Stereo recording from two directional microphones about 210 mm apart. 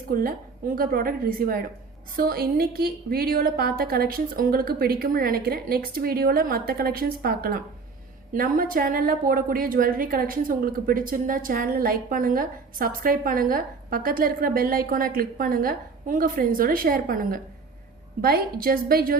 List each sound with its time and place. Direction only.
0.1 s a woman's voice: 45° right (ahead or behind)